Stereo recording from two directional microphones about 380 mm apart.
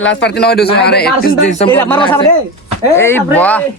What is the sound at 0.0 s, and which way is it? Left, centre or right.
A man's voice, left.